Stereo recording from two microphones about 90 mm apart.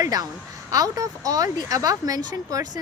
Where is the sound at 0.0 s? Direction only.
45° right (ahead or behind).